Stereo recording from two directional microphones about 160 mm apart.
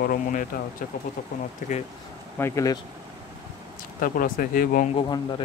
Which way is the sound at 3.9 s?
60° left (ahead or behind).